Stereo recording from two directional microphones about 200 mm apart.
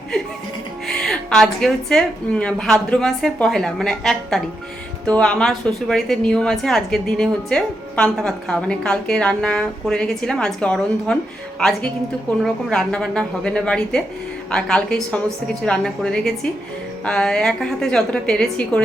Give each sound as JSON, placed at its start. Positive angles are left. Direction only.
{"t": 0.9, "sound": "a woman's voice", "side_deg": 5}
{"t": 12.4, "sound": "a woman's voice", "side_deg": 0}